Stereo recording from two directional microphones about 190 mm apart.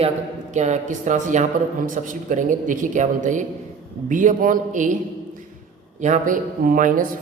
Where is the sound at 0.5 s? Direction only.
40° right (ahead or behind).